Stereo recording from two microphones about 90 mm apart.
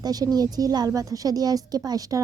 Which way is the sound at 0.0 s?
45° right (ahead or behind).